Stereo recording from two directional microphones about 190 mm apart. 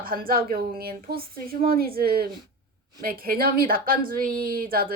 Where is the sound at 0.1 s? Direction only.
50° right (ahead or behind).